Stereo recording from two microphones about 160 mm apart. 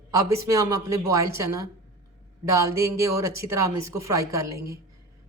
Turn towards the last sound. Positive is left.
turn(degrees=-20)  # may be behind; listen again after turning